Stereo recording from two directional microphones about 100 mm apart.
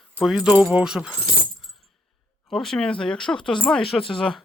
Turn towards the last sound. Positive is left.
turn(degrees=5)  # may be behind; listen again after turning